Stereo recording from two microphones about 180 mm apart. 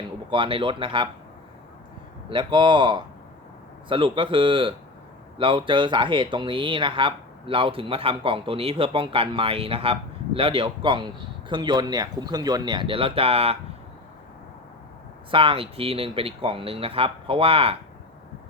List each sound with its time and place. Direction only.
0.3 s speech: 30° right (ahead or behind)
2.3 s speech: 25° right (ahead or behind)
15.3 s speech: 30° right (ahead or behind)